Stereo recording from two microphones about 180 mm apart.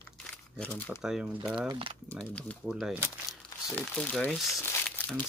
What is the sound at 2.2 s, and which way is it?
Speech, 5° left (ahead or behind).